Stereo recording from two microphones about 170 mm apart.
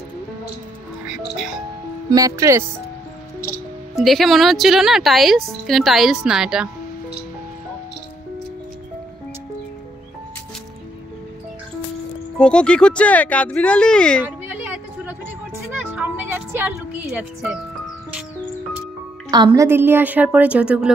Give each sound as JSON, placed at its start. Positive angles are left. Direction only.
{"t": 1.0, "sound": "music", "side_deg": -5}
{"t": 2.0, "sound": "speech", "side_deg": -20}
{"t": 3.9, "sound": "speech", "side_deg": 0}
{"t": 12.4, "sound": "speech", "side_deg": 5}
{"t": 14.2, "sound": "a sound", "side_deg": -10}
{"t": 15.9, "sound": "music", "side_deg": -10}
{"t": 17.1, "sound": "speech", "side_deg": -5}
{"t": 19.3, "sound": "a woman's voice", "side_deg": -20}